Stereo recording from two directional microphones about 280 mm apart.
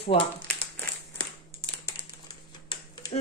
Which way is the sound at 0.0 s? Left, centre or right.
Centre.